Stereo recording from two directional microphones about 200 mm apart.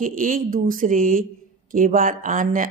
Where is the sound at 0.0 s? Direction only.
45° right (ahead or behind).